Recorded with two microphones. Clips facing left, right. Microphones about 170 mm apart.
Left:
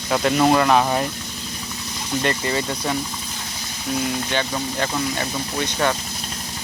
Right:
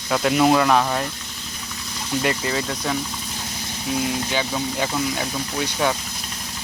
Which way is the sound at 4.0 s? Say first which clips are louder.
Left 1 dB; centre (ahead or behind).